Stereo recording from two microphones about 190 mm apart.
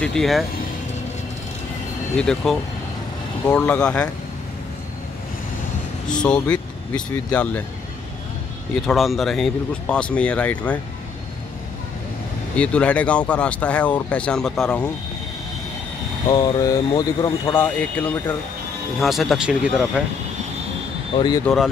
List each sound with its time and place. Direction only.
0.0 s speech: 5° left (ahead or behind)
2.1 s speech: 5° left (ahead or behind)
6.0 s speech: 5° left (ahead or behind)
8.8 s speech: centre (ahead or behind)
12.5 s speech: 5° left (ahead or behind)
16.3 s speech: 20° left (ahead or behind)
18.0 s speech: 5° left (ahead or behind)
21.5 s speech: 5° left (ahead or behind)